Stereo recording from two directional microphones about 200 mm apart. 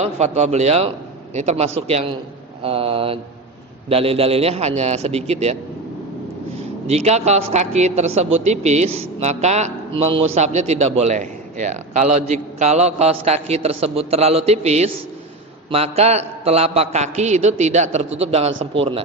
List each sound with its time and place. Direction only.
0.0 s a man's voice: 35° right (ahead or behind)
2.6 s mantra: 30° right (ahead or behind)
3.8 s a man's voice: 30° right (ahead or behind)
6.8 s a man's voice: 30° right (ahead or behind)